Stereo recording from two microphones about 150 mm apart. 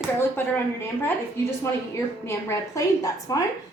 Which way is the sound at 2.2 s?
20° left (ahead or behind).